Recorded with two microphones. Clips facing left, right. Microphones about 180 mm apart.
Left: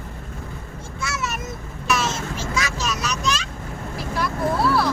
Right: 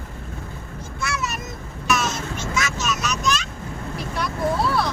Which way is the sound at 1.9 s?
30° left (ahead or behind).